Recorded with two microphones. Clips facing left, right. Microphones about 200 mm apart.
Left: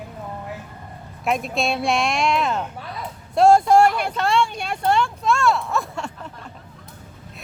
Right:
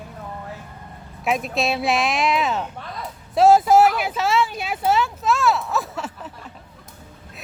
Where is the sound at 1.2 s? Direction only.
Centre (ahead or behind).